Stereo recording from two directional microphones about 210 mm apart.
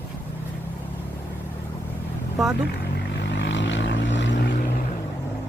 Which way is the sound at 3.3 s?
60° left (ahead or behind).